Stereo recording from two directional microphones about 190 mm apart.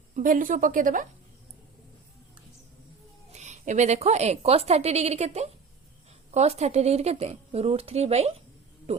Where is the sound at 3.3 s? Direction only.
40° right (ahead or behind).